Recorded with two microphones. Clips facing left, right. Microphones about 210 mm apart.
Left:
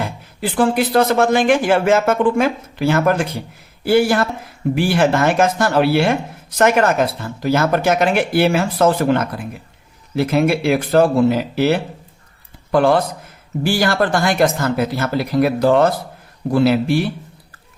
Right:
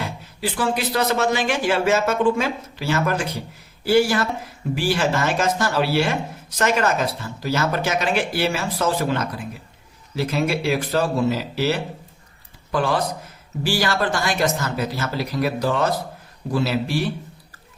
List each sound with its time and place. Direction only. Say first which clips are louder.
0.0 s speech: left 4 dB; 55° left (ahead or behind)